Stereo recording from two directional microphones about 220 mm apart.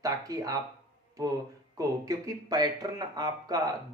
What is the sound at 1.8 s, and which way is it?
Speech, 15° right (ahead or behind).